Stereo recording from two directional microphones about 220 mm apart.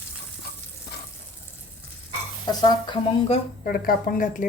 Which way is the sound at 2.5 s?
20° left (ahead or behind).